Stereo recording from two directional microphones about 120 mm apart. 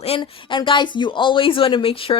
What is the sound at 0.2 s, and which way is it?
Speech, 40° left (ahead or behind).